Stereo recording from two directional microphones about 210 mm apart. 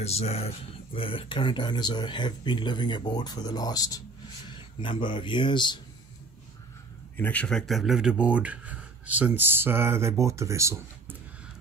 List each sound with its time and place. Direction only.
0.0 s speech: 30° left (ahead or behind)
7.2 s speech: 5° left (ahead or behind); by 11.1 s 15° right (ahead or behind)